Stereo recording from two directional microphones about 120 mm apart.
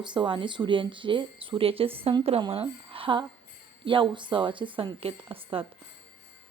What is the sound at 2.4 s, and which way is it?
A woman's voice, 50° right (ahead or behind).